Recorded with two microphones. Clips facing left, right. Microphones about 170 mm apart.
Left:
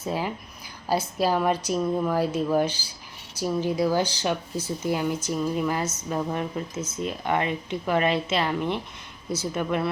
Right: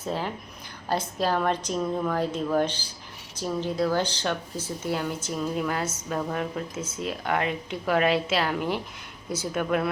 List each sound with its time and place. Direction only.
0.0 s a woman's voice: 10° left (ahead or behind)
6.7 s a woman's voice: 10° right (ahead or behind)